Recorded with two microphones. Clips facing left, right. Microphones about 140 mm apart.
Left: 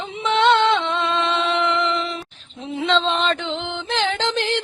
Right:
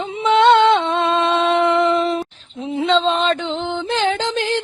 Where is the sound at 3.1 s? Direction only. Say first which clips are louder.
Right 3 dB; 40° right (ahead or behind).